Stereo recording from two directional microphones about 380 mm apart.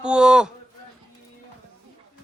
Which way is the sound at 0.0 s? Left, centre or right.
Centre.